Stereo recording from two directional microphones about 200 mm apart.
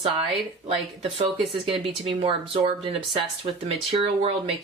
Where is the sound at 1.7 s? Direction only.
25° right (ahead or behind).